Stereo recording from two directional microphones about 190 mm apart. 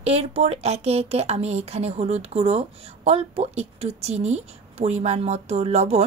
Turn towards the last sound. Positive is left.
turn(degrees=-35)  # may be behind; listen again after turning